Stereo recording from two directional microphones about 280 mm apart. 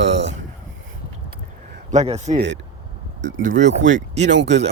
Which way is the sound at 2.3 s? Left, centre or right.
Right.